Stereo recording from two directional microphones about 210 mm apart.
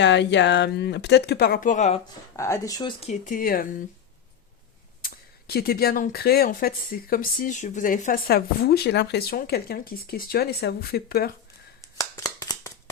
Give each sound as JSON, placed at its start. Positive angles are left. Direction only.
{"t": 0.0, "sound": "speech", "side_deg": 55}
{"t": 2.3, "sound": "speech", "side_deg": 15}
{"t": 3.1, "sound": "speech", "side_deg": 40}
{"t": 5.0, "sound": "speech", "side_deg": 45}
{"t": 11.8, "sound": "shuffling cards", "side_deg": 15}